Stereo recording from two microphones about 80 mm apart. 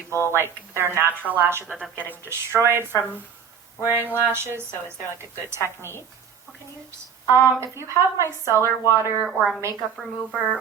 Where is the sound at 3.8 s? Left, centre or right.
Right.